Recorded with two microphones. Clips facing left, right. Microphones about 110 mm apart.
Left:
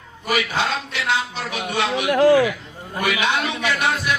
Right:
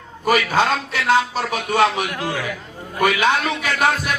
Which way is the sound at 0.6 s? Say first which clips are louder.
Right 5 dB; 45° right (ahead or behind).